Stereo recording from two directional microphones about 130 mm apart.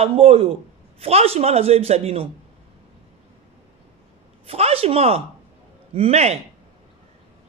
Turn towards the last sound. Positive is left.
turn(degrees=-55)  # may be behind; listen again after turning